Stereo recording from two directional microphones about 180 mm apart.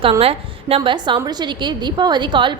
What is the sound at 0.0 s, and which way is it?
A woman's voice, 30° right (ahead or behind).